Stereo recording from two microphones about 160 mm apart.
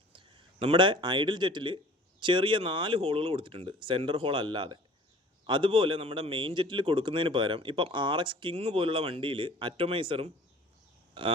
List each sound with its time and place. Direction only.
0.1 s a man's voice: 30° right (ahead or behind)